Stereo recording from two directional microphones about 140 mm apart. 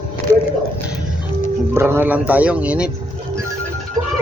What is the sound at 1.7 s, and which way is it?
Speech, 20° right (ahead or behind).